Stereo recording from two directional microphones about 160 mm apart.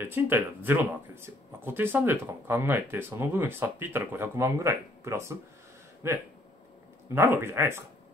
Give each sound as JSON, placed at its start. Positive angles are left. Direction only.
{"t": 0.0, "sound": "speech", "side_deg": -15}